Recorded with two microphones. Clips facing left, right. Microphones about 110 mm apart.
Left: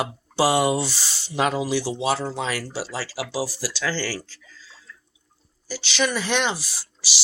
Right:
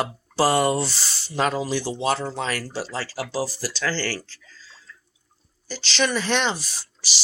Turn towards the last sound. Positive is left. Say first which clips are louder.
# even
turn(degrees=10)  # may be behind; listen again after turning